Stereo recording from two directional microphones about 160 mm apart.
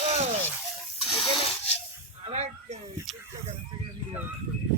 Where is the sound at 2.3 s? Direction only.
45° right (ahead or behind).